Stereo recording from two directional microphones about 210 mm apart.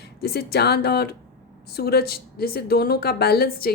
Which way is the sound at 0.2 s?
50° left (ahead or behind).